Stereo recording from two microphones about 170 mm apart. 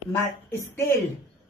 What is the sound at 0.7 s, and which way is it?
Speech, 15° left (ahead or behind).